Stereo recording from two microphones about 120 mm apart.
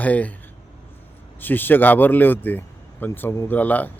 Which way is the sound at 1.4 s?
15° left (ahead or behind).